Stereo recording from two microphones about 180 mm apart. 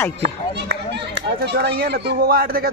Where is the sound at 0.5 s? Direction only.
70° right (ahead or behind).